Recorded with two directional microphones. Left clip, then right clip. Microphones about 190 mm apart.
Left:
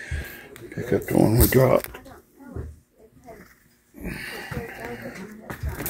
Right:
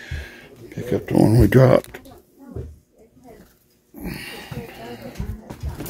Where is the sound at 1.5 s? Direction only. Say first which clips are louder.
Right 5 dB; 50° right (ahead or behind).